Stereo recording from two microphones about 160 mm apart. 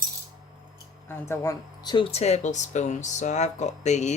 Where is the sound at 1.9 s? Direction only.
30° left (ahead or behind).